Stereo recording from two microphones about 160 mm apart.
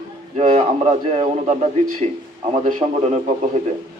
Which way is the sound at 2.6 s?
45° right (ahead or behind).